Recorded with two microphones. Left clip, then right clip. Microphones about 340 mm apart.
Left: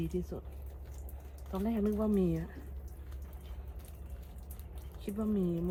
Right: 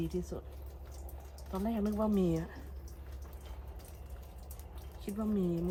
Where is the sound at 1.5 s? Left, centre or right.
Centre.